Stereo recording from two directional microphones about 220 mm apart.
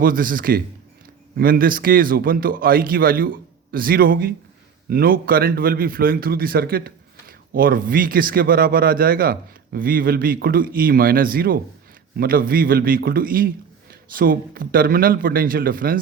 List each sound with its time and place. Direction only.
0.0 s a man's voice: 40° right (ahead or behind)